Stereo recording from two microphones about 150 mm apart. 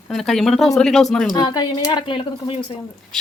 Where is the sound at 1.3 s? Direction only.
25° left (ahead or behind).